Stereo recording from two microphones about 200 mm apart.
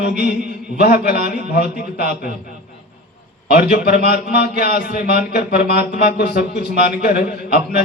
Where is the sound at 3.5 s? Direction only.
50° left (ahead or behind).